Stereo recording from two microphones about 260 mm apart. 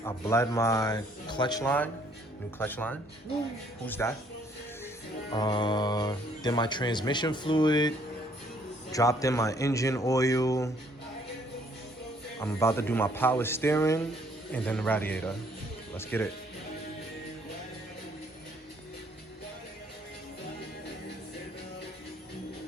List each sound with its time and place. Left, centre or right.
0.0 s speech: centre
5.3 s speech: centre
12.4 s speech: centre